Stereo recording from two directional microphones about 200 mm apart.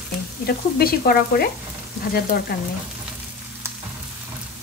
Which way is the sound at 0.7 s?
50° left (ahead or behind).